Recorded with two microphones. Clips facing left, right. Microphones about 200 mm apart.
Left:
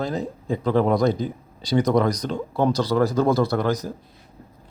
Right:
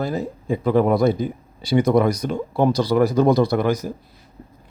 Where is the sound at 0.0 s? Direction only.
5° right (ahead or behind).